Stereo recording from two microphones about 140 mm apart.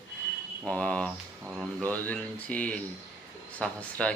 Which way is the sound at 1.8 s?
10° left (ahead or behind).